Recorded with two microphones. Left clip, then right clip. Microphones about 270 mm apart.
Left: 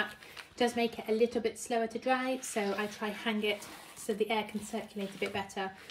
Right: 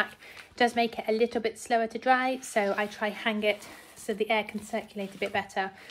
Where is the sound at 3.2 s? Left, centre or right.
Right.